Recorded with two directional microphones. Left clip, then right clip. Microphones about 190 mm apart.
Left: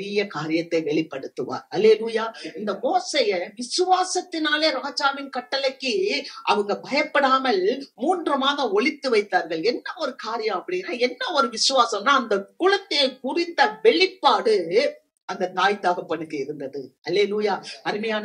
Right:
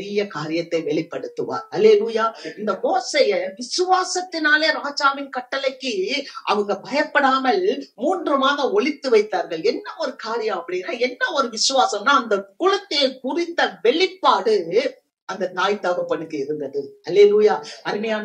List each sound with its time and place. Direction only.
0.0 s a woman's voice: 35° left (ahead or behind)